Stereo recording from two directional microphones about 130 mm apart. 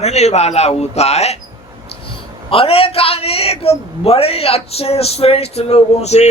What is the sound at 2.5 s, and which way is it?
A man's voice, 45° left (ahead or behind).